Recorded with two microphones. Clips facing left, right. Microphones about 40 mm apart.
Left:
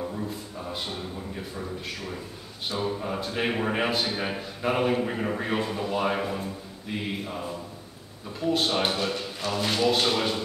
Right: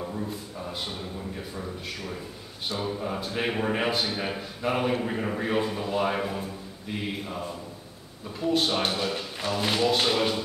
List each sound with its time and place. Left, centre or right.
0.1 s a man's voice: centre